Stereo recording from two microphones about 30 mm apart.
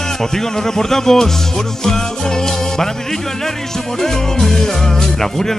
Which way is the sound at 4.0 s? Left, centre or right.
Centre.